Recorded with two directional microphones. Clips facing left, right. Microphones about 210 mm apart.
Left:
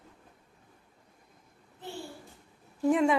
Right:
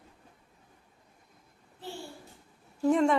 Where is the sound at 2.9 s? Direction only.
5° left (ahead or behind).